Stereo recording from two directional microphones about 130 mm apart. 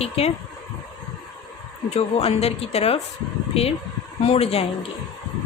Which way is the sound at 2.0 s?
50° left (ahead or behind).